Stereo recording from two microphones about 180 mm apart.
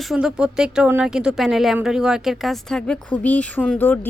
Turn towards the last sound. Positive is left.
turn(degrees=10)  # may be behind; listen again after turning